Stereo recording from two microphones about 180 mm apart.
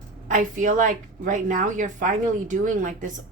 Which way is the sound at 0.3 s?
45° right (ahead or behind).